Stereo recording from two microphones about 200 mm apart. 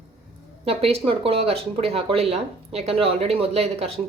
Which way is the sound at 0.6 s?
30° right (ahead or behind).